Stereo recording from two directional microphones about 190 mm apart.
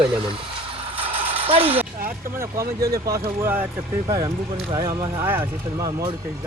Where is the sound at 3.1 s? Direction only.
10° right (ahead or behind).